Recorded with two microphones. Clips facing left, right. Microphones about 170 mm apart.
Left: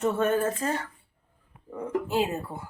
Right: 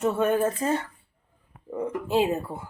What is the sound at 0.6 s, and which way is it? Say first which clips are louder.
Speech: right 4 dB; 15° right (ahead or behind).